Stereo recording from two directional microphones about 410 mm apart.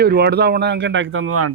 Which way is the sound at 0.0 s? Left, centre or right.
Right.